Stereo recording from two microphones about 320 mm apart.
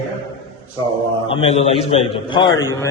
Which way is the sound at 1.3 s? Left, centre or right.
Centre.